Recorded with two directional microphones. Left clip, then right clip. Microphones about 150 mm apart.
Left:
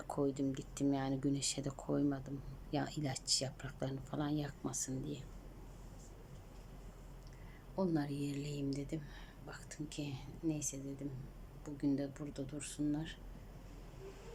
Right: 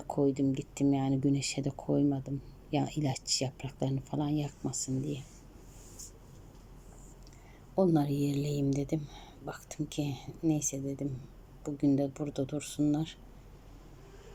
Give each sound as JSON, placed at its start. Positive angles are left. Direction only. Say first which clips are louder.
{"t": 0.1, "sound": "speech", "louder": "right 8 dB", "side_deg": -10}
{"t": 7.8, "sound": "a woman's voice", "louder": "right 10 dB", "side_deg": -25}